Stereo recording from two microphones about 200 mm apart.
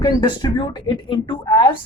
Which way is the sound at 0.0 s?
25° left (ahead or behind).